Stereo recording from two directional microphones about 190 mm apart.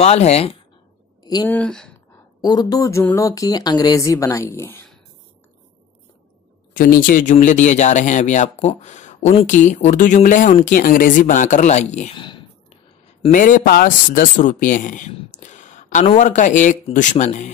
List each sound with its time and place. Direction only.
0.0 s speech: 35° left (ahead or behind)
1.2 s a sound: 20° left (ahead or behind)
1.5 s speech: 5° left (ahead or behind)
2.4 s speech: 20° left (ahead or behind)
6.7 s speech: 45° left (ahead or behind)
12.2 s a sound: 25° left (ahead or behind)
13.3 s speech: 45° left (ahead or behind)